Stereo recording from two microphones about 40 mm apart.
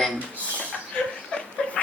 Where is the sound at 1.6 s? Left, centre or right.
Centre.